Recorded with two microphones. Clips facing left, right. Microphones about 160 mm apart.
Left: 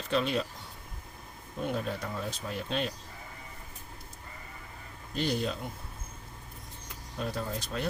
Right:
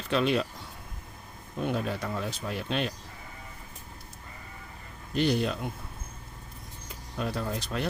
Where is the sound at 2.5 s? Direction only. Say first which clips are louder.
Right 2 dB; 70° right (ahead or behind).